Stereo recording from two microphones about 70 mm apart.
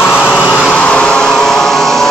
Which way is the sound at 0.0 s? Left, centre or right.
Left.